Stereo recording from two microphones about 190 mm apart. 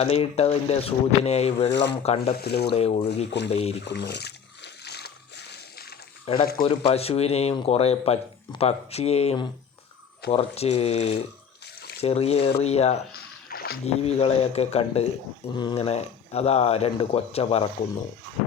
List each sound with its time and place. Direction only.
0.0 s speech: 35° left (ahead or behind)
1.7 s speech: 65° left (ahead or behind)
2.0 s speech: 35° left (ahead or behind)
2.4 s speech: 60° left (ahead or behind)
2.7 s speech: 35° left (ahead or behind)
3.8 s splash: 60° left (ahead or behind)
6.4 s speech: 50° left (ahead or behind)
6.7 s speech: 30° left (ahead or behind)
13.5 s a sound: 55° left (ahead or behind)
13.8 s speech: 30° left (ahead or behind)